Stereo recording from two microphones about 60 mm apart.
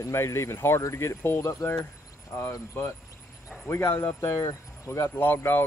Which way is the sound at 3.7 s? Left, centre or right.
Left.